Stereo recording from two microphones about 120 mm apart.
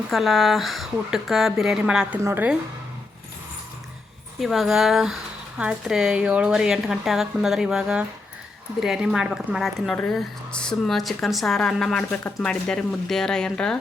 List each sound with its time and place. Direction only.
0.1 s speech: centre (ahead or behind); by 2.6 s 15° right (ahead or behind)
4.4 s speech: centre (ahead or behind)